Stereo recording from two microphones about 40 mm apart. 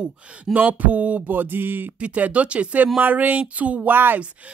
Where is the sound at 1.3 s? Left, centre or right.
Right.